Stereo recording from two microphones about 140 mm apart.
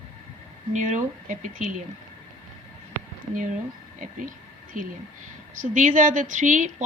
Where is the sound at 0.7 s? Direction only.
60° right (ahead or behind).